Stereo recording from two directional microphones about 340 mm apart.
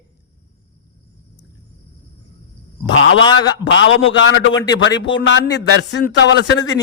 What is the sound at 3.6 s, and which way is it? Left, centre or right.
A man's voice, left.